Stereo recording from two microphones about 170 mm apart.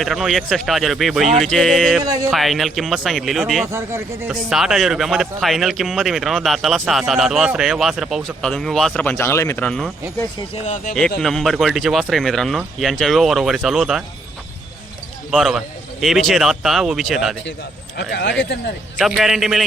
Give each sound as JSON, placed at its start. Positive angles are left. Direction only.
{"t": 0.0, "sound": "speech", "side_deg": 0}
{"t": 2.0, "sound": "speech", "side_deg": -20}
{"t": 2.3, "sound": "speech", "side_deg": 0}
{"t": 3.7, "sound": "speech", "side_deg": -15}
{"t": 4.3, "sound": "speech", "side_deg": -5}
{"t": 10.5, "sound": "speech", "side_deg": 40}
{"t": 11.2, "sound": "speech", "side_deg": 0}
{"t": 15.3, "sound": "speech", "side_deg": 0}
{"t": 17.9, "sound": "speech", "side_deg": 85}
{"t": 18.9, "sound": "speech", "side_deg": 0}